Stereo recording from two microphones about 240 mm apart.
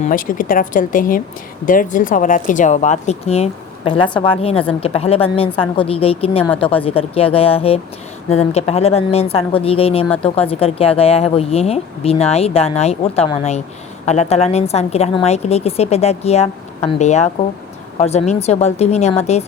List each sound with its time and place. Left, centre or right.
0.0 s a woman's voice: left